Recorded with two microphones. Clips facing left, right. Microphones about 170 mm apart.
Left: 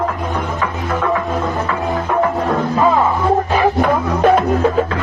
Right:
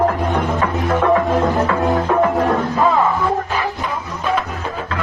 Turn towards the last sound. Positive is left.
turn(degrees=55)  # may be behind; listen again after turning